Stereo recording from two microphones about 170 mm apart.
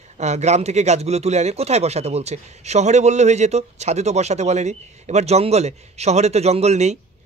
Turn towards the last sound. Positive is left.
turn(degrees=-40)  # may be behind; listen again after turning